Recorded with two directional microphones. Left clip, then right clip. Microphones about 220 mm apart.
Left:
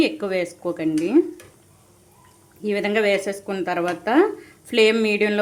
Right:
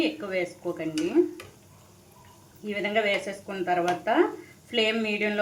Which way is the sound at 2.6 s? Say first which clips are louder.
Left 6 dB; 55° left (ahead or behind).